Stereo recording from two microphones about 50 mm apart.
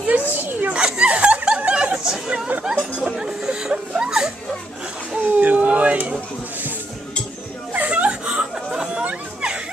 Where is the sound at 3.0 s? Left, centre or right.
Centre.